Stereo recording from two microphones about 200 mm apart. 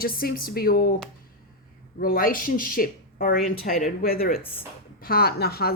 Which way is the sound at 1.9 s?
45° left (ahead or behind).